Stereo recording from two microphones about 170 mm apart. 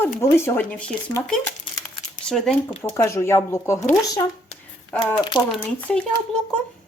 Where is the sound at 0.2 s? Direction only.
15° left (ahead or behind).